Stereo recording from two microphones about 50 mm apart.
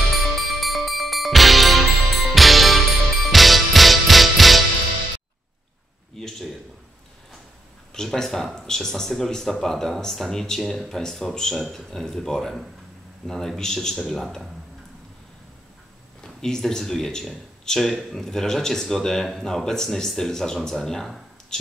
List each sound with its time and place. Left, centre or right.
0.2 s music: centre
6.1 s a sound: centre
7.9 s speech: centre
16.2 s speech: centre